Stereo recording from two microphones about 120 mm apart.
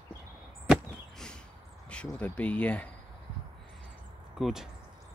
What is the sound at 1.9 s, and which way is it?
Speech, 10° left (ahead or behind).